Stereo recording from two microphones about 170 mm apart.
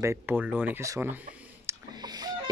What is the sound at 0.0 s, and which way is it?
Speech, 15° right (ahead or behind).